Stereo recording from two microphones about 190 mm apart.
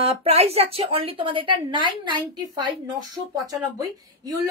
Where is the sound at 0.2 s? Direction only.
30° right (ahead or behind).